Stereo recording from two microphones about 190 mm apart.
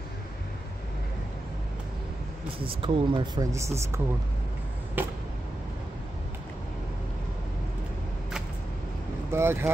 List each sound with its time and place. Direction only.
2.6 s speech: 30° right (ahead or behind)
3.5 s speech: 15° right (ahead or behind)
9.3 s speech: 15° right (ahead or behind)